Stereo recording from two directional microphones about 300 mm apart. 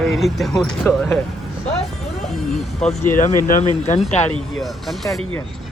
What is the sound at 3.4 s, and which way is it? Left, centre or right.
Speech, left.